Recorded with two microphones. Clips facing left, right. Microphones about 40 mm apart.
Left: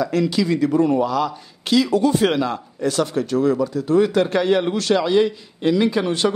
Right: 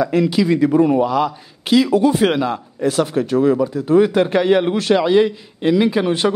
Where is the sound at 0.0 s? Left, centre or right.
Centre.